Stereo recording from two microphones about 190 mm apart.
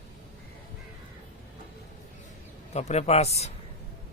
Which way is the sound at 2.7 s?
35° left (ahead or behind).